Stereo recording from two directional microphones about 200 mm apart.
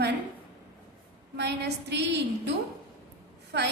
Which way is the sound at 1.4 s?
55° right (ahead or behind).